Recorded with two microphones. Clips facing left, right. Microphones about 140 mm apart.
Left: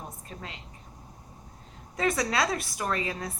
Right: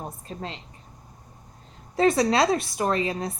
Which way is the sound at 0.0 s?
30° right (ahead or behind).